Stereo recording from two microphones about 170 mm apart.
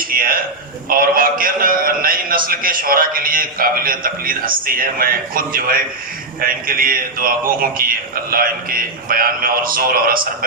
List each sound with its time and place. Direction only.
0.0 s a man's voice: 55° right (ahead or behind)